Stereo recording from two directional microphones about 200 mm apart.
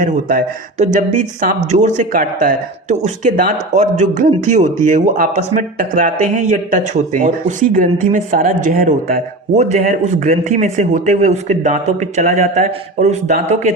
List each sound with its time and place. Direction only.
0.0 s speech: 45° right (ahead or behind)